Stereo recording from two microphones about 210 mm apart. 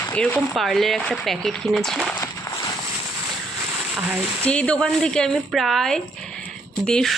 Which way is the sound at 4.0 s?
5° right (ahead or behind).